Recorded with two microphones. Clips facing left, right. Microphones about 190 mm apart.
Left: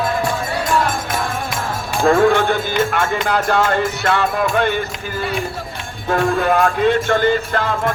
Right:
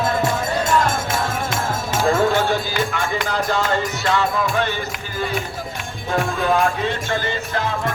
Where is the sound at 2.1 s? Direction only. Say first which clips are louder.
Left 5 dB; 65° left (ahead or behind).